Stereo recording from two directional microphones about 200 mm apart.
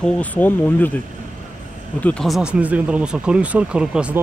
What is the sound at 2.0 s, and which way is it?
Speech, 5° left (ahead or behind).